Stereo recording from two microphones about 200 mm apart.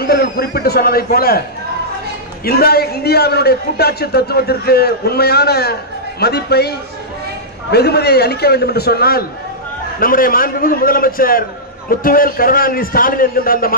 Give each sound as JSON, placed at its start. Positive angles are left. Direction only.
{"t": 0.0, "sound": "a man's voice", "side_deg": 50}
{"t": 2.4, "sound": "a man's voice", "side_deg": 50}
{"t": 7.7, "sound": "a man's voice", "side_deg": 55}